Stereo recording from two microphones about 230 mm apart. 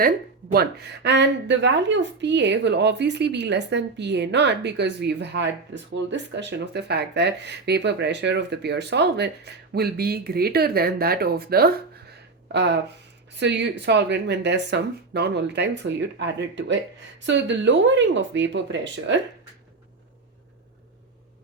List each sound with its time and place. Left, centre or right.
0.5 s speech: right